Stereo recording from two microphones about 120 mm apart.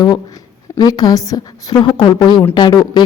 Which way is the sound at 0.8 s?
35° left (ahead or behind).